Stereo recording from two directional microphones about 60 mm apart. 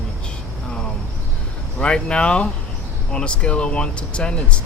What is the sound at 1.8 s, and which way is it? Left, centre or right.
Speech, centre.